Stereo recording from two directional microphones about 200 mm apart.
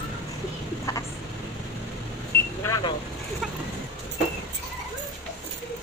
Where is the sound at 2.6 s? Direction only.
15° left (ahead or behind).